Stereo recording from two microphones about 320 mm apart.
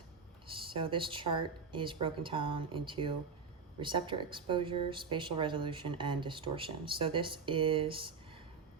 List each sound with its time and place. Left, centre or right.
0.4 s speech: centre